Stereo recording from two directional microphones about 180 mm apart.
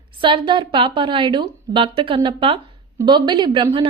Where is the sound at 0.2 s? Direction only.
25° right (ahead or behind).